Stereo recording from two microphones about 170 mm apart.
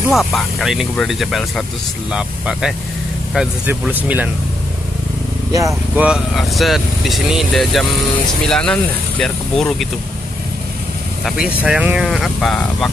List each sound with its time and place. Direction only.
0.1 s speech: centre (ahead or behind)
5.5 s speech: 20° right (ahead or behind)
6.0 s speech: centre (ahead or behind)
11.2 s speech: 5° right (ahead or behind)